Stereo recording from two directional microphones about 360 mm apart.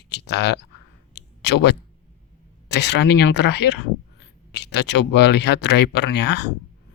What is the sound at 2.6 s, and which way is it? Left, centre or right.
Speech, left.